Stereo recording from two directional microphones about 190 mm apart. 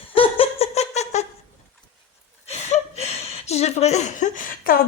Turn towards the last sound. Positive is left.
turn(degrees=50)  # may be behind; listen again after turning